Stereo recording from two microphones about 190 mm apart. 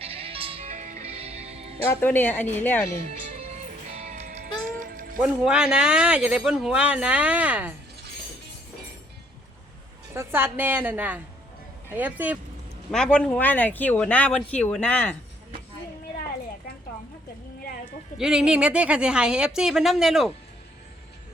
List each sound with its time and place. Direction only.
0.0 s music: 30° right (ahead or behind)
1.9 s speech: 10° left (ahead or behind)
3.3 s music: 35° right (ahead or behind)
5.2 s speech: 5° right (ahead or behind)
10.2 s a woman's voice: 10° right (ahead or behind)
12.9 s speech: 5° left (ahead or behind)
18.2 s speech: 5° right (ahead or behind)